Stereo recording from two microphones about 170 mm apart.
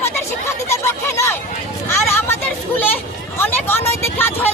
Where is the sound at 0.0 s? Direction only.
15° left (ahead or behind).